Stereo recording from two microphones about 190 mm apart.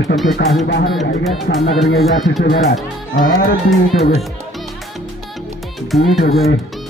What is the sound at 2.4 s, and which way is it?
Speech, 45° left (ahead or behind).